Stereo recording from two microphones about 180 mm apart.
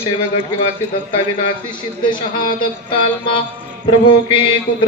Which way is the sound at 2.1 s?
25° left (ahead or behind).